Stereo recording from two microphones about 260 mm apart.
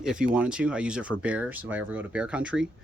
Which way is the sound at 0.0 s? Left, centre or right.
Centre.